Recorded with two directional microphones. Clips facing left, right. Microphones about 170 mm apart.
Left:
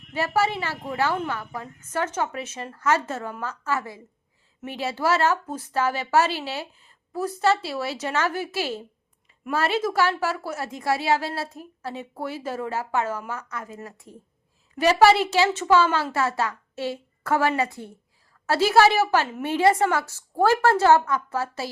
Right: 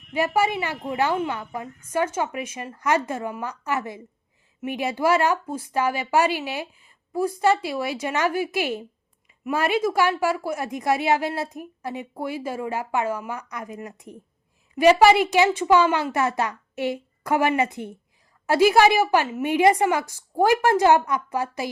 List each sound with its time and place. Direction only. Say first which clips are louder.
0.1 s a woman's voice: right 2 dB; 15° right (ahead or behind)